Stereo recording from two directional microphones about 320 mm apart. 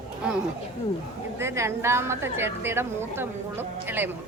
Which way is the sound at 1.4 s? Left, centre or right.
Centre.